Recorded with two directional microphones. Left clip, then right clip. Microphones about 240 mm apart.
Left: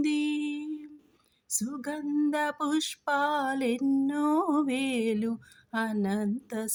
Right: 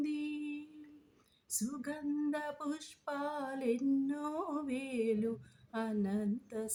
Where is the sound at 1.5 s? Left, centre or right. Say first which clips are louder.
Left 7 dB; left.